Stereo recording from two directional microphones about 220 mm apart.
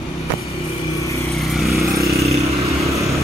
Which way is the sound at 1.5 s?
Centre (ahead or behind).